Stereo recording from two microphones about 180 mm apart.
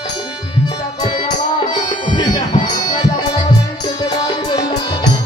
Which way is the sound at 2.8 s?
25° left (ahead or behind).